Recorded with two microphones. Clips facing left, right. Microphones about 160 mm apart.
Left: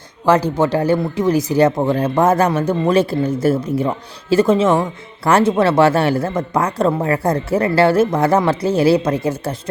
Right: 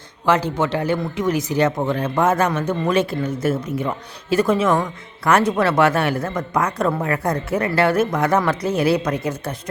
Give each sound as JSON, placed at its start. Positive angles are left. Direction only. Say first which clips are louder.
{"t": 0.3, "sound": "speech", "louder": "left 4 dB", "side_deg": 40}